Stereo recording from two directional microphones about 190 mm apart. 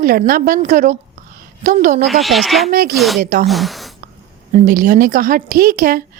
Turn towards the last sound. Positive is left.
turn(degrees=-50)  # may be behind; listen again after turning